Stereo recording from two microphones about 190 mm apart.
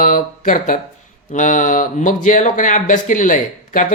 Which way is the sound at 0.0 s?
45° left (ahead or behind).